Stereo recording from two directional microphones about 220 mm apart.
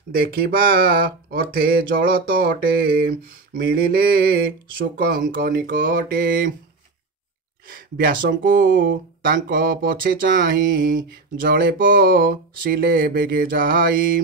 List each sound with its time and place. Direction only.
0.1 s speech: 40° right (ahead or behind)
7.6 s speech: 40° right (ahead or behind)